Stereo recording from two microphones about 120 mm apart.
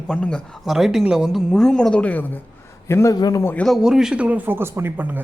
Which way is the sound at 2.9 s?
25° left (ahead or behind).